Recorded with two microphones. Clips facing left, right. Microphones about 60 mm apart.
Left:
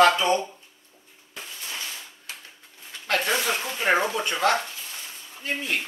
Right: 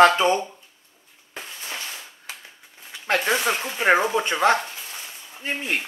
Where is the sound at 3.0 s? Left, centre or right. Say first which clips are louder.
Right 3 dB; centre.